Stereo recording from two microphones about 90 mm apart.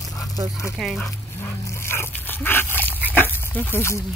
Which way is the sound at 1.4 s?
25° left (ahead or behind).